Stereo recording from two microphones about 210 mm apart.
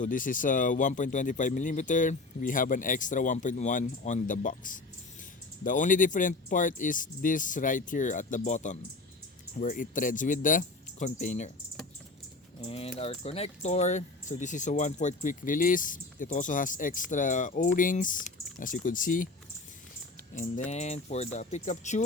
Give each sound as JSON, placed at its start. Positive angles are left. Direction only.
{"t": 0.0, "sound": "speech", "side_deg": 40}
{"t": 12.6, "sound": "speech", "side_deg": 25}
{"t": 20.3, "sound": "speech", "side_deg": 35}